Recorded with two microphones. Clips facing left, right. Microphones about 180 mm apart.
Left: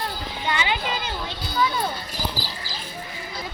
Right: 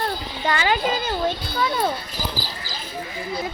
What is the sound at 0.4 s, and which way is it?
Speech, 45° right (ahead or behind).